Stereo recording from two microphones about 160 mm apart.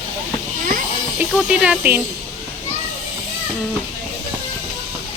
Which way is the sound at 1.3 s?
5° right (ahead or behind).